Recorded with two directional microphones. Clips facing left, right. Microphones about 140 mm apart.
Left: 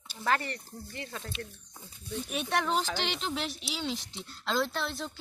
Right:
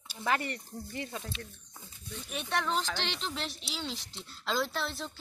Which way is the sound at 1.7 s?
5° left (ahead or behind).